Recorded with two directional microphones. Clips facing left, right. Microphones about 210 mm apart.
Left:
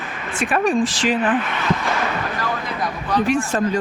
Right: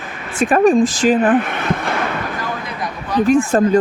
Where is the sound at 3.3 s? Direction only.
45° right (ahead or behind).